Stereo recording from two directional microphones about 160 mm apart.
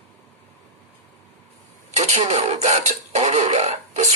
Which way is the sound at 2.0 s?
40° right (ahead or behind).